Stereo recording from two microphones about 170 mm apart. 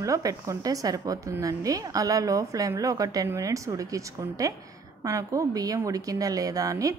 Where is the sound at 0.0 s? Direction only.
20° right (ahead or behind).